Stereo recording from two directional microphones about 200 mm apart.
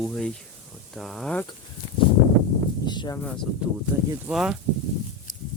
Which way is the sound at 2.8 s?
20° left (ahead or behind).